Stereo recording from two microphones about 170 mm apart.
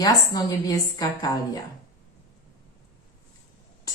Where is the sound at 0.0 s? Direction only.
20° left (ahead or behind).